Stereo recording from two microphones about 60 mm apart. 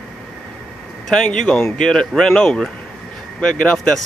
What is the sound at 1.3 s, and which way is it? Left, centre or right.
Speech, centre.